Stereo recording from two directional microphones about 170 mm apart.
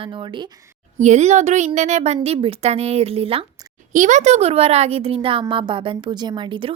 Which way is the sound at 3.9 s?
50° right (ahead or behind).